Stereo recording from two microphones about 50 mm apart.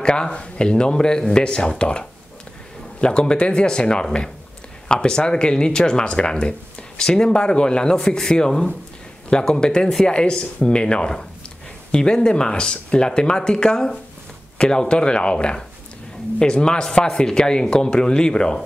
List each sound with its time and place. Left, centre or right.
0.0 s speech: centre